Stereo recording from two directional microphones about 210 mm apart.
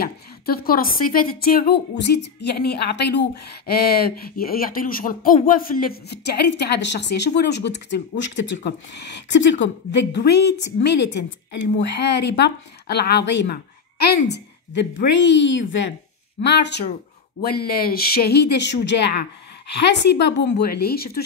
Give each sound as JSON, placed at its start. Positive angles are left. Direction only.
{"t": 0.0, "sound": "a woman's voice", "side_deg": 45}